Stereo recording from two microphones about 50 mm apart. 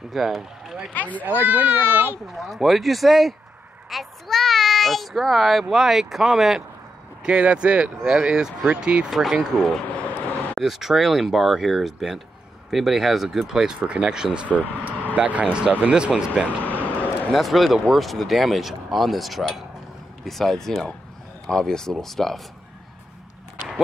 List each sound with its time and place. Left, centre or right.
0.1 s a child's voice: centre
0.9 s speech: left
1.2 s a child's voice: right
2.3 s a child's voice: centre
7.2 s speech: centre
9.1 s a child's voice: centre
9.8 s speech: left
10.6 s a child's voice: centre
16.6 s a sound: left
17.3 s a child's voice: centre